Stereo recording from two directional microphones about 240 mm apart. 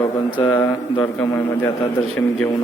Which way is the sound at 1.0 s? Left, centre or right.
Centre.